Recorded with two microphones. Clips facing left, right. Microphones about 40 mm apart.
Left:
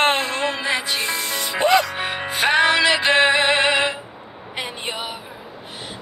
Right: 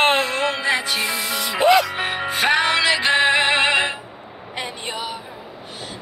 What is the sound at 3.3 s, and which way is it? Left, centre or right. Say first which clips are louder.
Synthetic singing: even; right.